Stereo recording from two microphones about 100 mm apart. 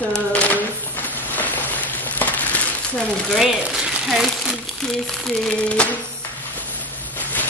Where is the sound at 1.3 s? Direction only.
15° left (ahead or behind).